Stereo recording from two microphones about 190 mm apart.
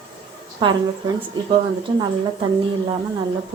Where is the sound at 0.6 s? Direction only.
25° right (ahead or behind).